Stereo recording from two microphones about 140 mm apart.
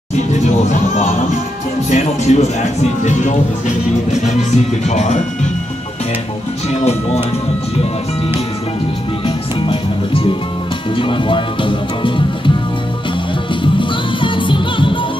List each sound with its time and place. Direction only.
0.7 s music: 55° left (ahead or behind)
9.2 s music: 35° left (ahead or behind)
11.0 s speech: 35° left (ahead or behind)
13.7 s music: 35° left (ahead or behind)